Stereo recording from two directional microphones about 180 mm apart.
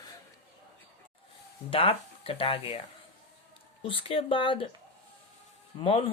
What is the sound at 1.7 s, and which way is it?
Speech, 30° left (ahead or behind).